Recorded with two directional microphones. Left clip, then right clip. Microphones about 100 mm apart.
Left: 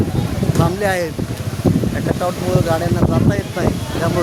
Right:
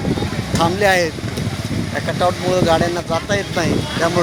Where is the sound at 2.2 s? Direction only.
25° right (ahead or behind).